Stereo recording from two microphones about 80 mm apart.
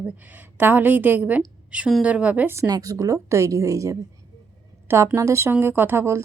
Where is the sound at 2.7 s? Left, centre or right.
Right.